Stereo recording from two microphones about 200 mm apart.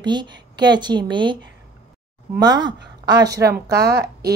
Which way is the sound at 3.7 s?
55° right (ahead or behind).